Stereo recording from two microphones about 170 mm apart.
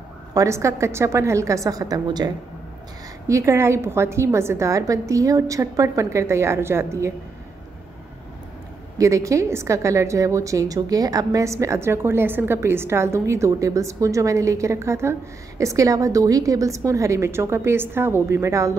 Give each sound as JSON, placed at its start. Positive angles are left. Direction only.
{"t": 0.3, "sound": "a woman's voice", "side_deg": -20}
{"t": 8.9, "sound": "a woman's voice", "side_deg": -20}